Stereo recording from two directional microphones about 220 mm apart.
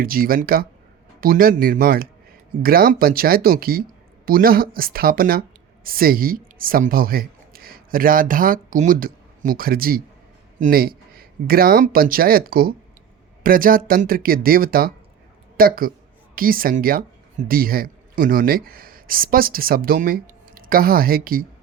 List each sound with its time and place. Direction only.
0.0 s speech: 40° right (ahead or behind)